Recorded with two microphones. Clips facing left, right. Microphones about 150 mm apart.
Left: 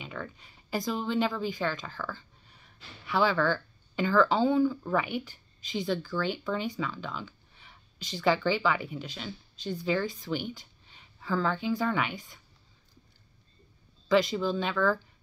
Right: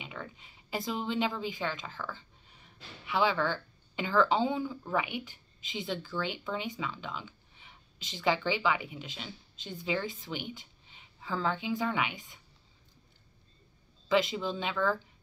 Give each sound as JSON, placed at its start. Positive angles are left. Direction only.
{"t": 0.0, "sound": "a woman's voice", "side_deg": -20}
{"t": 14.0, "sound": "speech", "side_deg": -20}